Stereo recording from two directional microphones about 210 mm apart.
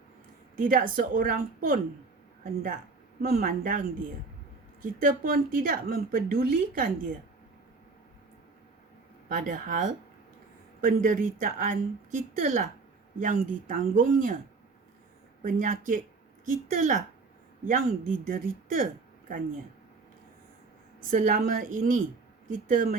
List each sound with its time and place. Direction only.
0.5 s a woman's voice: 40° right (ahead or behind)
3.3 s a woman's voice: 40° right (ahead or behind)
9.4 s a woman's voice: 40° right (ahead or behind)
15.4 s a woman's voice: 40° right (ahead or behind)
21.0 s a woman's voice: 40° right (ahead or behind)